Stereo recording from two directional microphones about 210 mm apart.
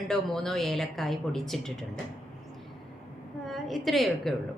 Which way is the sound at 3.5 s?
Centre (ahead or behind).